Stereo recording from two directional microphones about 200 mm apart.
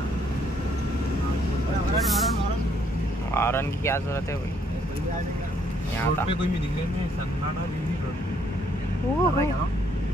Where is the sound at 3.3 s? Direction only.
10° left (ahead or behind).